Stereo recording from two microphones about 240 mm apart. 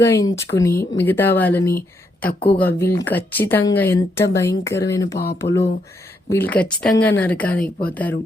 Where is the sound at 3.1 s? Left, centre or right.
Centre.